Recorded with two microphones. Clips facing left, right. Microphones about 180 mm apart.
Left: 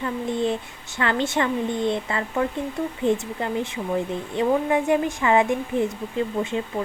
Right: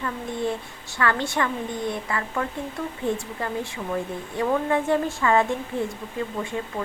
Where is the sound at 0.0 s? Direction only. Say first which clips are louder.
Left 3 dB; 20° left (ahead or behind).